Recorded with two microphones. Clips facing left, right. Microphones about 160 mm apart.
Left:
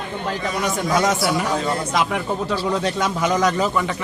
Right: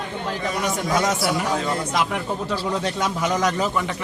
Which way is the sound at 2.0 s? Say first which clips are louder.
Left 2 dB; 90° left.